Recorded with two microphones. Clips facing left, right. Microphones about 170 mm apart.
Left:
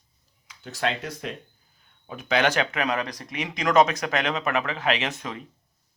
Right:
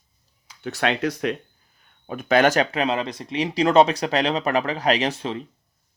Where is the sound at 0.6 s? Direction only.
70° right (ahead or behind).